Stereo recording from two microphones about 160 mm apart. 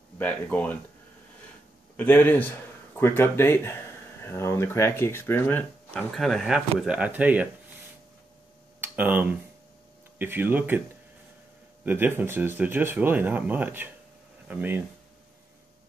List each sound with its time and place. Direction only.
0.2 s speech: 10° left (ahead or behind)
2.0 s speech: 10° left (ahead or behind); by 7.4 s 10° right (ahead or behind)
8.8 s speech: 10° right (ahead or behind)
11.8 s speech: 10° right (ahead or behind)